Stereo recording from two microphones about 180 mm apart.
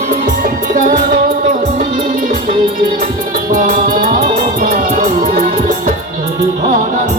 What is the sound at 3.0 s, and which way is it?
Music, 50° right (ahead or behind).